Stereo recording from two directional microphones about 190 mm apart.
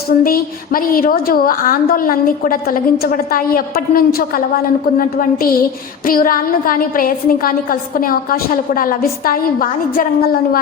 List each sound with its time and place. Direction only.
0.1 s a woman's voice: 50° left (ahead or behind)